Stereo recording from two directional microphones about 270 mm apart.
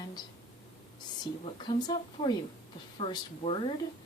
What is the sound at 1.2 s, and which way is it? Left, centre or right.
A woman's voice, centre.